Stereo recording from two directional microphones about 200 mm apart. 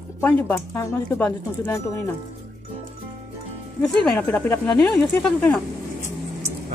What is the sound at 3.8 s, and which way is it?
A woman's voice, 5° left (ahead or behind).